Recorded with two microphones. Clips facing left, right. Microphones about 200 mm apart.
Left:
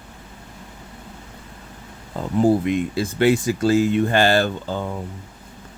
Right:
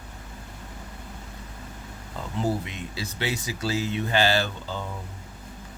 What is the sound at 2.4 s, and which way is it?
Speech, 50° left (ahead or behind).